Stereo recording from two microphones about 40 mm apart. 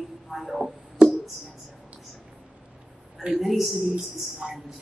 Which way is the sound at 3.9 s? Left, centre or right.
Centre.